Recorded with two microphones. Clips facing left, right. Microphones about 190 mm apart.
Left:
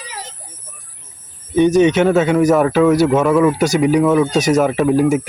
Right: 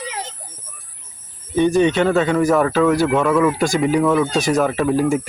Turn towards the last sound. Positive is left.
turn(degrees=5)  # may be behind; listen again after turning